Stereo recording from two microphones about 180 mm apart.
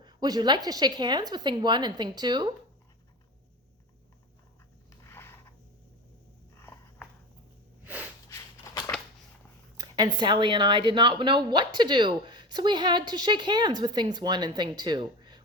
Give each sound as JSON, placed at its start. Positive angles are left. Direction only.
{"t": 0.0, "sound": "speech", "side_deg": -25}
{"t": 5.0, "sound": "a sound", "side_deg": 15}
{"t": 7.9, "sound": "snort", "side_deg": -10}
{"t": 9.7, "sound": "speech", "side_deg": -25}